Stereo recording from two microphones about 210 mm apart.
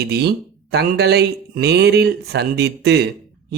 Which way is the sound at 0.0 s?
50° right (ahead or behind).